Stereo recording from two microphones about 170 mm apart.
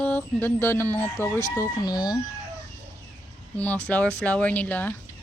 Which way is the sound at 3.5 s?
10° left (ahead or behind).